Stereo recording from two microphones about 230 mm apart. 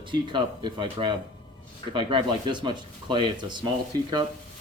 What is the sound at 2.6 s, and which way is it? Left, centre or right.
Speech, centre.